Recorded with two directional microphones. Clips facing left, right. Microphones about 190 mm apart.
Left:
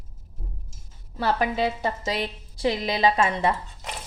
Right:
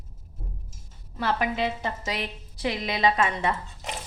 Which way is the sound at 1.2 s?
35° left (ahead or behind).